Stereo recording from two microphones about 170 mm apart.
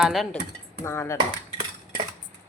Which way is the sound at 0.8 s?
15° left (ahead or behind).